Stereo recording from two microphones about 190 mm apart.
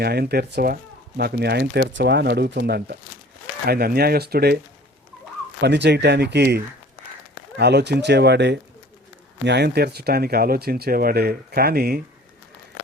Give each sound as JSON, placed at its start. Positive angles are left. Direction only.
{"t": 0.0, "sound": "speech", "side_deg": -55}
{"t": 7.6, "sound": "speech", "side_deg": -60}